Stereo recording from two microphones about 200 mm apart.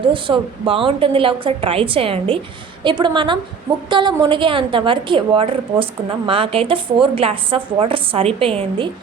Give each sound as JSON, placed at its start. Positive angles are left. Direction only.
{"t": 0.1, "sound": "a woman's voice", "side_deg": -25}